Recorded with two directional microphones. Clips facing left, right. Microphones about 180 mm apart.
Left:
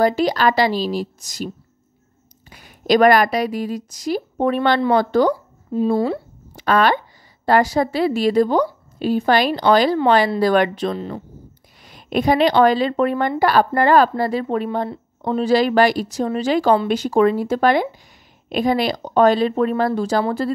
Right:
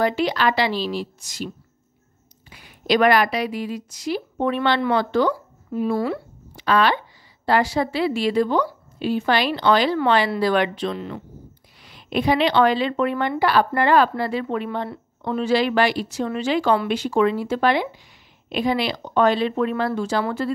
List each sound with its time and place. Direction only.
0.0 s speech: 40° left (ahead or behind)
2.5 s a woman's voice: 45° left (ahead or behind)
5.3 s a woman's voice: 25° left (ahead or behind)
6.5 s a woman's voice: 45° left (ahead or behind)
11.8 s a woman's voice: 45° left (ahead or behind)